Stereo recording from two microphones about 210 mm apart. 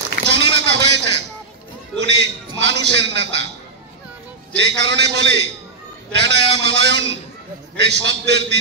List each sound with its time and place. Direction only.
0.3 s a sound: 55° right (ahead or behind)
2.0 s a man's voice: 55° right (ahead or behind)
4.6 s a man's voice: 55° right (ahead or behind)